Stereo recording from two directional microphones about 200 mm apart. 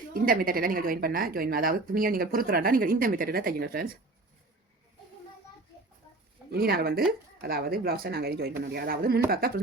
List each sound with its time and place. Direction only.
0.1 s a woman's voice: 45° right (ahead or behind)
6.5 s a woman's voice: 50° right (ahead or behind)